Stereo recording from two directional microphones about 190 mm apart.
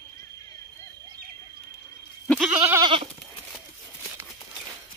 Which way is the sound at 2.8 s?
25° right (ahead or behind).